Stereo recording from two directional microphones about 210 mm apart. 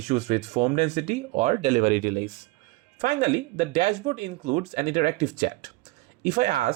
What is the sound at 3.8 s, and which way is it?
Speech, 40° right (ahead or behind).